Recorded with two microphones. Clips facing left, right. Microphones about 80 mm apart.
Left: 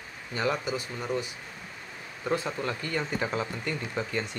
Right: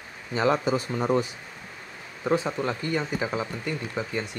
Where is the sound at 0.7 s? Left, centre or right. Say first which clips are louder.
Right 7 dB; right.